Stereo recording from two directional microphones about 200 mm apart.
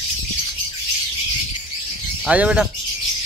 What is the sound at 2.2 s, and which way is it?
Speech, 5° right (ahead or behind).